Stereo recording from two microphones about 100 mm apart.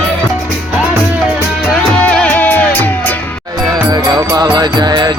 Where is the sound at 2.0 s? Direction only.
15° left (ahead or behind).